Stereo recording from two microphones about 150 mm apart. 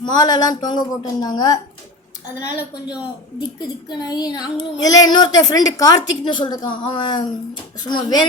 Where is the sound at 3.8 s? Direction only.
30° left (ahead or behind).